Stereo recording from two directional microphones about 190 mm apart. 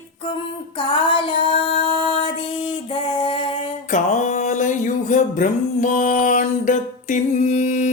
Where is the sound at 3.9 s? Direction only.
40° left (ahead or behind).